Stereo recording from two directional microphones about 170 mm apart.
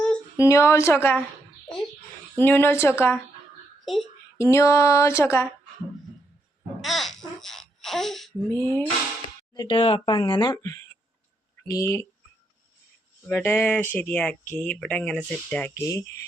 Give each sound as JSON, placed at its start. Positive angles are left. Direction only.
{"t": 0.3, "sound": "speech", "side_deg": 15}
{"t": 2.4, "sound": "speech", "side_deg": 10}
{"t": 4.4, "sound": "speech", "side_deg": 15}
{"t": 6.8, "sound": "babbling", "side_deg": 0}
{"t": 8.4, "sound": "speech", "side_deg": 10}
{"t": 9.6, "sound": "speech", "side_deg": 30}
{"t": 13.2, "sound": "speech", "side_deg": 10}